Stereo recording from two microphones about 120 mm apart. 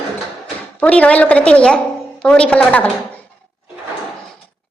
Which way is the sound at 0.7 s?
10° left (ahead or behind).